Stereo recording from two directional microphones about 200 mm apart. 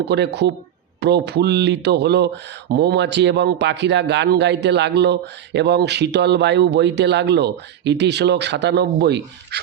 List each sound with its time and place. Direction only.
0.0 s speech: 55° right (ahead or behind)